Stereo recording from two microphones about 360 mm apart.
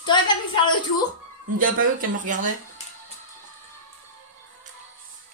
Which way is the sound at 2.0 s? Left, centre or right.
Right.